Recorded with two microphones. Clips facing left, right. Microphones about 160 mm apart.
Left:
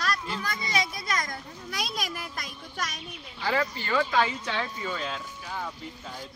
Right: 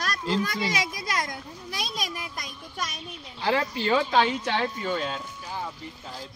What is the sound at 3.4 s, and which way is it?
Speech, 75° right (ahead or behind).